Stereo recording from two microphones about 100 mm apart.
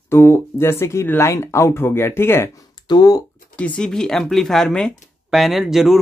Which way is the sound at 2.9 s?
40° left (ahead or behind).